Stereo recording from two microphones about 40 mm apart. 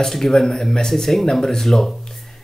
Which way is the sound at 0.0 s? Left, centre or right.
Centre.